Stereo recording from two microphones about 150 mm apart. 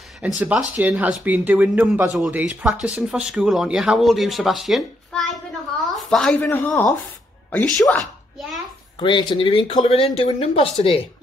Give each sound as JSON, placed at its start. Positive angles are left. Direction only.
{"t": 0.2, "sound": "speech", "side_deg": -10}
{"t": 9.0, "sound": "speech", "side_deg": 30}